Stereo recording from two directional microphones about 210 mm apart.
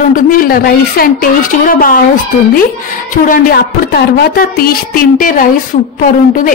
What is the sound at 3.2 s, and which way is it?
A woman's voice, 45° left (ahead or behind).